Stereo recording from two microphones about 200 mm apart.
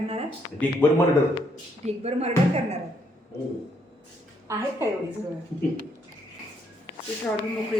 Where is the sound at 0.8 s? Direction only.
10° left (ahead or behind).